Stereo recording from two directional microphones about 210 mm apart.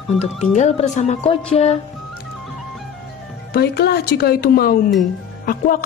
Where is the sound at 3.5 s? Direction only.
50° left (ahead or behind).